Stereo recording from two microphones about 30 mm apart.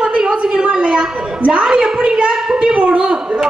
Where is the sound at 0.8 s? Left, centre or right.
Right.